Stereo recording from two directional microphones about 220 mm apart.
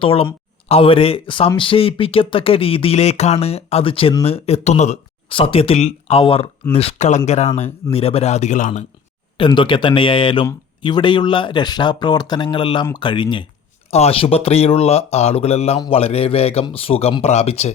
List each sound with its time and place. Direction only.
0.0 s speech: 25° left (ahead or behind)
9.4 s speech: 20° left (ahead or behind)